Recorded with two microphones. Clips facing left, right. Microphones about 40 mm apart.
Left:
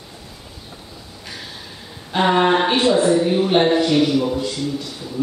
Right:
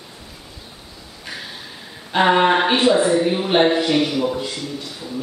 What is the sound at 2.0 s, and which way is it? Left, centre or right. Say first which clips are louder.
Speech: right 1 dB; centre.